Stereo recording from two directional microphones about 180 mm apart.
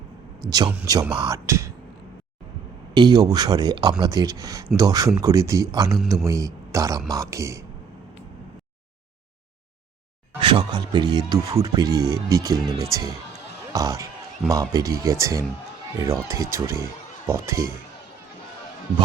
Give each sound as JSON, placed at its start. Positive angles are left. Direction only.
{"t": 0.4, "sound": "speech", "side_deg": -20}
{"t": 2.9, "sound": "a man's voice", "side_deg": -25}
{"t": 10.4, "sound": "speech", "side_deg": -25}